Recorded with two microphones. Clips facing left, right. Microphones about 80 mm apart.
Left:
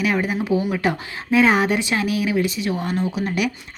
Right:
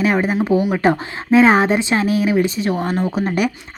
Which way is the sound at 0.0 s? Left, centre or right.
Right.